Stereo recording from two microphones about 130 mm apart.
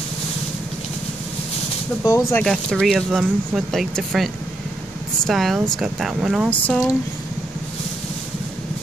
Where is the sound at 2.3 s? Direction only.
5° left (ahead or behind).